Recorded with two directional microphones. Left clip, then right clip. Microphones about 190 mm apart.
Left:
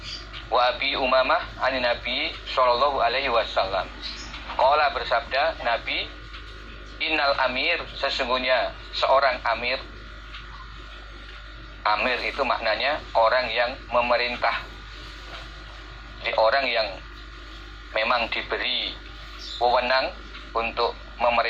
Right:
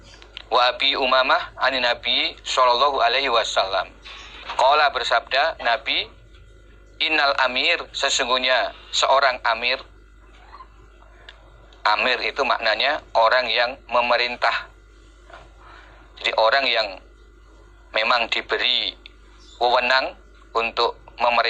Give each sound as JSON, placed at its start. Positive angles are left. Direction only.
{"t": 0.5, "sound": "a man's voice", "side_deg": -35}
{"t": 11.8, "sound": "a man's voice", "side_deg": -35}
{"t": 16.2, "sound": "a man's voice", "side_deg": -35}
{"t": 17.9, "sound": "a man's voice", "side_deg": -35}